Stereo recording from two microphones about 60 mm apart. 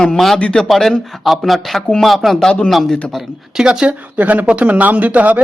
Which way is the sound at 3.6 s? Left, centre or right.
Centre.